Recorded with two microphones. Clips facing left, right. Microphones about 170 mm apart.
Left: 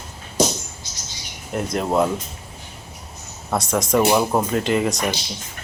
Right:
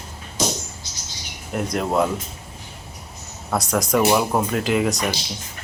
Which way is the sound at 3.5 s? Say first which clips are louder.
Left 1 dB; centre (ahead or behind).